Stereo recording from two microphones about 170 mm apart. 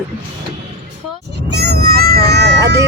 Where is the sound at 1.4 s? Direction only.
75° right (ahead or behind).